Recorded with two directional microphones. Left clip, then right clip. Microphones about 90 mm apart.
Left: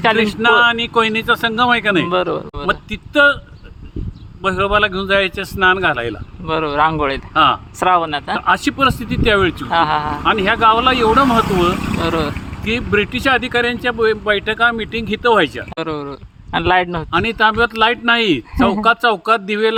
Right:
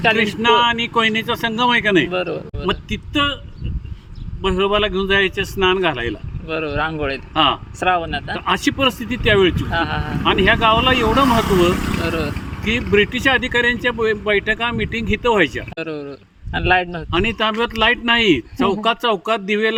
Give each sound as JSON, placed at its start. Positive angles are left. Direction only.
{"t": 0.2, "sound": "speech", "side_deg": 25}
{"t": 2.0, "sound": "speech", "side_deg": 50}
{"t": 2.6, "sound": "speech", "side_deg": 25}
{"t": 4.4, "sound": "speech", "side_deg": 25}
{"t": 6.5, "sound": "speech", "side_deg": 50}
{"t": 7.3, "sound": "speech", "side_deg": 25}
{"t": 7.8, "sound": "speech", "side_deg": 55}
{"t": 8.4, "sound": "speech", "side_deg": 20}
{"t": 9.7, "sound": "speech", "side_deg": 45}
{"t": 10.2, "sound": "speech", "side_deg": 25}
{"t": 12.0, "sound": "speech", "side_deg": 45}
{"t": 12.6, "sound": "speech", "side_deg": 25}
{"t": 15.7, "sound": "speech", "side_deg": 50}
{"t": 17.1, "sound": "speech", "side_deg": 30}